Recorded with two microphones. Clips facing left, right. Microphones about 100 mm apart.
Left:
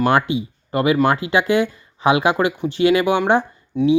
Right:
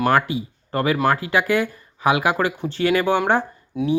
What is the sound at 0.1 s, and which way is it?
Speech, 25° left (ahead or behind).